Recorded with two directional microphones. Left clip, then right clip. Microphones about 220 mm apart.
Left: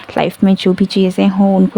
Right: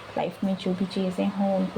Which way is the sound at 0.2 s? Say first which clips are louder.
Left 14 dB; 50° left (ahead or behind).